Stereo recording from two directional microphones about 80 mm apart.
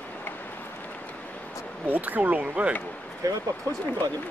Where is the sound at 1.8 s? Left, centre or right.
Right.